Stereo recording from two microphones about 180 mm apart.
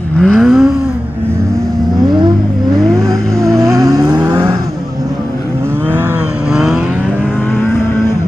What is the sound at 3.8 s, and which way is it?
Vehicle, 20° right (ahead or behind).